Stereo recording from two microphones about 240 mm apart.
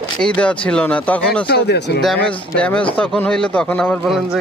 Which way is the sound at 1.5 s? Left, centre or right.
Left.